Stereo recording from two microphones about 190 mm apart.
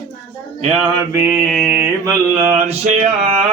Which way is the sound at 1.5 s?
Centre (ahead or behind).